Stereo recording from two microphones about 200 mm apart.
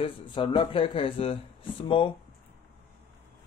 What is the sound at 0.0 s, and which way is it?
Speech, 25° left (ahead or behind).